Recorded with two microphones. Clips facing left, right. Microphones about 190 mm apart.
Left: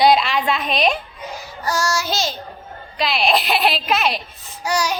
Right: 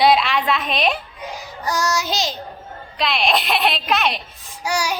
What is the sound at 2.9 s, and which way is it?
A woman's voice, centre (ahead or behind).